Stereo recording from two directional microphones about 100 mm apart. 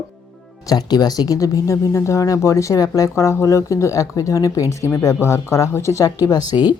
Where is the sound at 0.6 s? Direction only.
40° left (ahead or behind).